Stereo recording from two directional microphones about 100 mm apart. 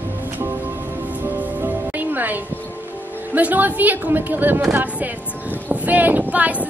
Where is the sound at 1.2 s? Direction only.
20° right (ahead or behind).